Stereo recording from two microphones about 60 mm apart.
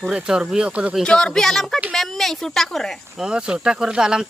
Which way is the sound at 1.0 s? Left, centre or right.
Centre.